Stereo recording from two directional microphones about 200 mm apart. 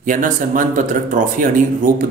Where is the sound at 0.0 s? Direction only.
40° right (ahead or behind).